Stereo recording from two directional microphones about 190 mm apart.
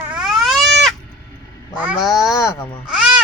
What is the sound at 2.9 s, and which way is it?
Owl, 5° right (ahead or behind).